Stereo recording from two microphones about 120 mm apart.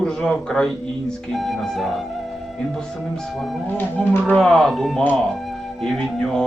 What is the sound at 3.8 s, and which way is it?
Speech, 15° left (ahead or behind).